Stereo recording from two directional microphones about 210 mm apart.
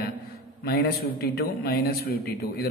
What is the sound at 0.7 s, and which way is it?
A man's voice, 45° left (ahead or behind).